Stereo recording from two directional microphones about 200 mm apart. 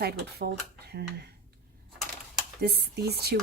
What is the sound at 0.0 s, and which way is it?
Speech, 55° right (ahead or behind).